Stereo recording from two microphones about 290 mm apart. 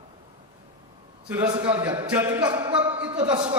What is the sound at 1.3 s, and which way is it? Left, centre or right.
A man's voice, centre.